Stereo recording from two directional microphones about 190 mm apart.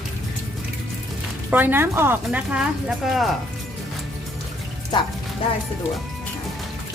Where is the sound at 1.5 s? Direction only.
10° right (ahead or behind).